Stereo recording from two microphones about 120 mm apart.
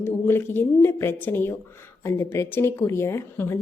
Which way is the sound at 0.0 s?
20° left (ahead or behind).